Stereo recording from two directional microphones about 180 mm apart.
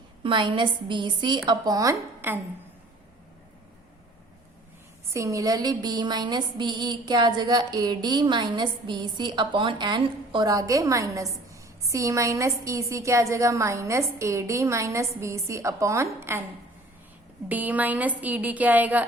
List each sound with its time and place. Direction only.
0.2 s a woman's voice: 25° right (ahead or behind)
5.1 s speech: 15° right (ahead or behind)
17.5 s speech: 10° right (ahead or behind)